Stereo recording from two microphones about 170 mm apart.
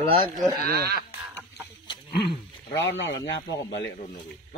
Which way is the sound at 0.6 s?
65° right (ahead or behind).